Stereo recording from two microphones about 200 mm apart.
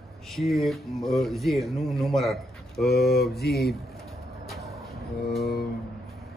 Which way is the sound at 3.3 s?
50° left (ahead or behind).